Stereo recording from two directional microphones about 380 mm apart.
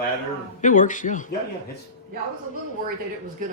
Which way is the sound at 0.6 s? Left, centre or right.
Centre.